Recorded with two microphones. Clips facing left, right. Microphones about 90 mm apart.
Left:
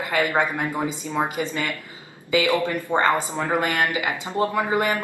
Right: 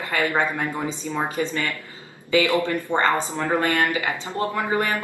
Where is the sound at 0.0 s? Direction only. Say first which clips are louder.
Left 1 dB; 20° left (ahead or behind).